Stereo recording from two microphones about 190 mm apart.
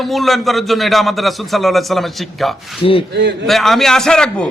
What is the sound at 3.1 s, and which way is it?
Speech, 60° right (ahead or behind).